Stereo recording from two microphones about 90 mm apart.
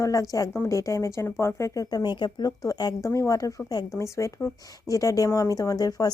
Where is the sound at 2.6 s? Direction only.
45° left (ahead or behind).